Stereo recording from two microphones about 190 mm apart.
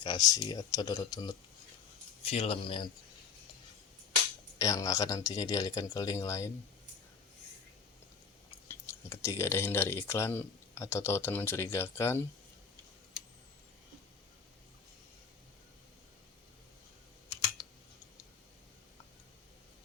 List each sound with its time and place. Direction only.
0.0 s speech: 20° left (ahead or behind)
4.5 s speech: 20° left (ahead or behind)
8.6 s speech: 15° left (ahead or behind)
17.6 s typing: 20° left (ahead or behind)